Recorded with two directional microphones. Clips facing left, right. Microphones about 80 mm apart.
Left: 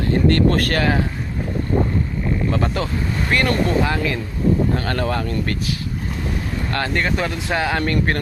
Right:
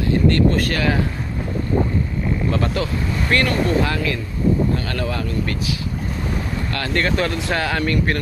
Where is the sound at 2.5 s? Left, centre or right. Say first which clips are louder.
Even; left.